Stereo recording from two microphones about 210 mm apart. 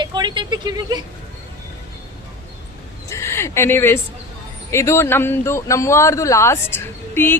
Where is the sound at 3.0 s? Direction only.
10° left (ahead or behind).